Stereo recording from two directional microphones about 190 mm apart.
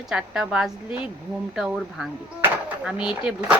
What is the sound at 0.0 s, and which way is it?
Speech, 5° right (ahead or behind).